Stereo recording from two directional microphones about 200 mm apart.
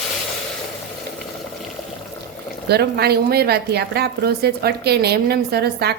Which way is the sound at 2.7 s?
55° right (ahead or behind).